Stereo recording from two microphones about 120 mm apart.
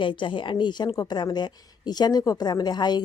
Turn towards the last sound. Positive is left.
turn(degrees=35)  # may be behind; listen again after turning